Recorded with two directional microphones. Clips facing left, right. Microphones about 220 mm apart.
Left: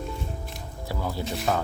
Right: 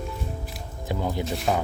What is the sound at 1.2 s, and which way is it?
Speech, centre (ahead or behind).